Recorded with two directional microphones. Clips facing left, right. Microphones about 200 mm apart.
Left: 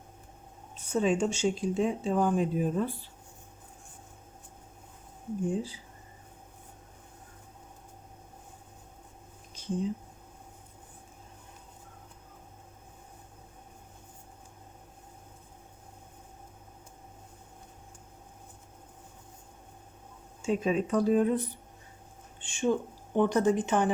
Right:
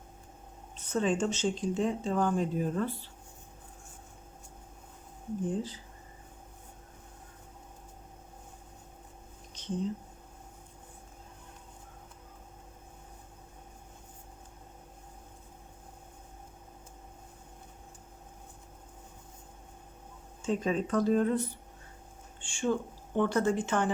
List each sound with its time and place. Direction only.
0.8 s speech: 10° left (ahead or behind)
5.5 s speech: 10° left (ahead or behind)
9.6 s a sound: 10° left (ahead or behind)
20.4 s speech: 10° left (ahead or behind)